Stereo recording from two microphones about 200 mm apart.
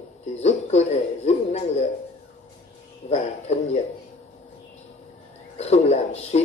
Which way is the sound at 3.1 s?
35° left (ahead or behind).